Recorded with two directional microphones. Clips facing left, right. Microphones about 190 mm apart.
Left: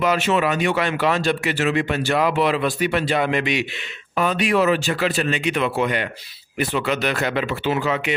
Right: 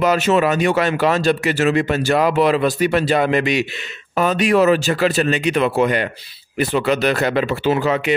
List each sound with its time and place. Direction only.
0.0 s speech: 40° right (ahead or behind)